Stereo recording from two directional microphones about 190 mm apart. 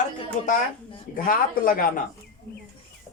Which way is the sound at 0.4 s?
40° left (ahead or behind).